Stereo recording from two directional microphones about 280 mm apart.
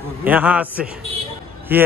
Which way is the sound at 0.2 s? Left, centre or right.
Centre.